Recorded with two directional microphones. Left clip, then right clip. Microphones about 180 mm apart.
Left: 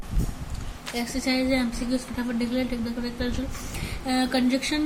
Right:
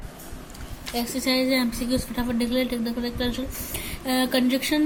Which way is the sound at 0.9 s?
10° right (ahead or behind).